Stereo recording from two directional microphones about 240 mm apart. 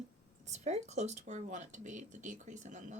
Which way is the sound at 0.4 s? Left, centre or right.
Right.